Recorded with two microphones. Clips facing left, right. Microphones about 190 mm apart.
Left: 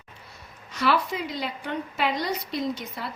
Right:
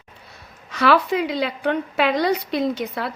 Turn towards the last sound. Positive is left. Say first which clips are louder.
# right 7 dB
turn(degrees=-65)  # may be behind; listen again after turning